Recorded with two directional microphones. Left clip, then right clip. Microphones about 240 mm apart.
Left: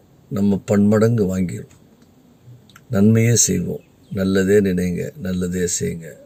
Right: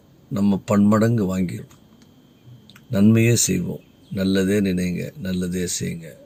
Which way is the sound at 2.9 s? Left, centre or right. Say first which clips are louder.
Left 1 dB; centre.